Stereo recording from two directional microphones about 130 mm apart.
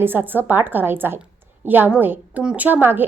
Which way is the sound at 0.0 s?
15° right (ahead or behind).